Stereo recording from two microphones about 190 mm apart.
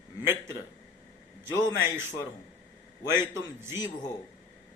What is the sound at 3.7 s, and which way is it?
Speech, 20° left (ahead or behind).